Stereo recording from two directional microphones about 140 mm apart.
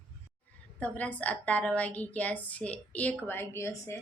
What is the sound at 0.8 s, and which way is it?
Speech, 10° left (ahead or behind).